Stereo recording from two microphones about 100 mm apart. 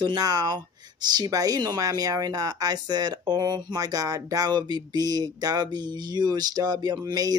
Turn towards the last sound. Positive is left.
turn(degrees=-40)  # may be behind; listen again after turning